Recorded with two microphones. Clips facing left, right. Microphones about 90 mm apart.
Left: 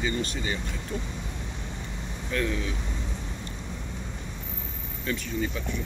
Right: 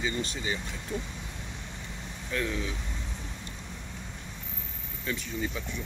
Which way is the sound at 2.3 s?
15° right (ahead or behind).